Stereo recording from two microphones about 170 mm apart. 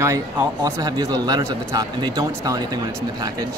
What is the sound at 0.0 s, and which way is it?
Speech, 15° right (ahead or behind).